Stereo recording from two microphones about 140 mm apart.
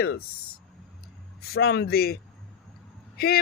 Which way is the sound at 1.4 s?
90° left.